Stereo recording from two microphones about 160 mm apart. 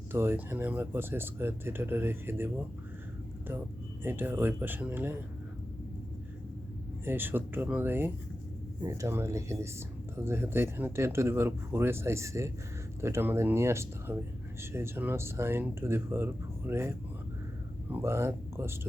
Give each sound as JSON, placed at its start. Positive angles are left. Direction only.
{"t": 0.1, "sound": "speech", "side_deg": -15}
{"t": 4.0, "sound": "speech", "side_deg": -15}
{"t": 7.0, "sound": "speech", "side_deg": -10}